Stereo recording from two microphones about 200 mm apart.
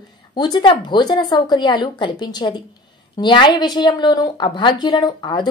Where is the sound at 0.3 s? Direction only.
20° left (ahead or behind).